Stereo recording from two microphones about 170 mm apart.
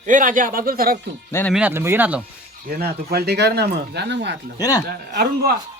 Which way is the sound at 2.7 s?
65° right (ahead or behind).